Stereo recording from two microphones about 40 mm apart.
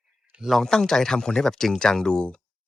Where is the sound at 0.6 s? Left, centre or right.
Centre.